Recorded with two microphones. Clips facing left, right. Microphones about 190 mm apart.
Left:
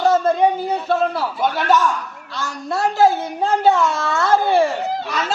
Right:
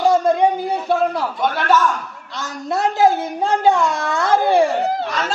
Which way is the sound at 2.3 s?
20° right (ahead or behind).